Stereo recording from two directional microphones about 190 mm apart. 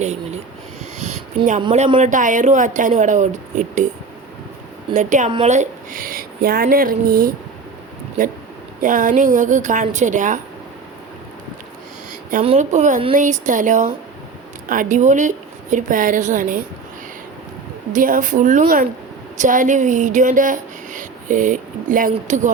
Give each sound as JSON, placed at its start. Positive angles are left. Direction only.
{"t": 0.0, "sound": "a woman's voice", "side_deg": -35}
{"t": 1.7, "sound": "a woman's voice", "side_deg": -35}
{"t": 4.9, "sound": "a woman's voice", "side_deg": -40}
{"t": 8.8, "sound": "a woman's voice", "side_deg": -45}
{"t": 12.4, "sound": "a woman's voice", "side_deg": -35}
{"t": 17.9, "sound": "a woman's voice", "side_deg": -45}